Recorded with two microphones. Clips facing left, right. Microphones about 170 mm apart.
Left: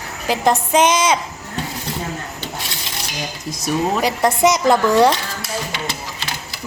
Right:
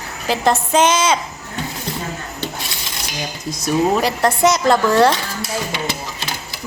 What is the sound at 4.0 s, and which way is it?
Speech, 20° left (ahead or behind).